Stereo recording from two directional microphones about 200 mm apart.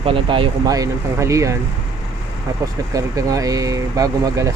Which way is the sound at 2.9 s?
15° right (ahead or behind).